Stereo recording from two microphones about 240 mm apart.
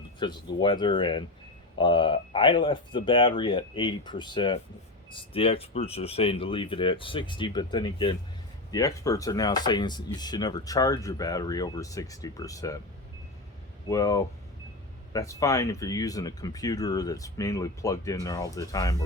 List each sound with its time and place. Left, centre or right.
0.2 s speech: centre
13.8 s speech: centre